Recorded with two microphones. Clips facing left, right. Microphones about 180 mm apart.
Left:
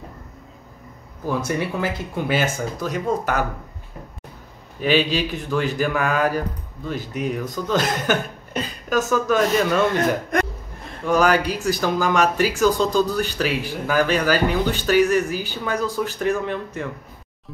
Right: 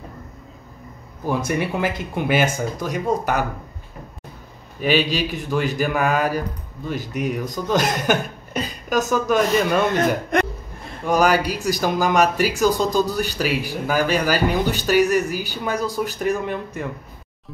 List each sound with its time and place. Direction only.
1.2 s speech: 15° right (ahead or behind)
4.7 s speech: 10° right (ahead or behind)